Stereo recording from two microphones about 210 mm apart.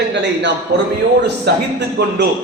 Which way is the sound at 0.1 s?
55° right (ahead or behind).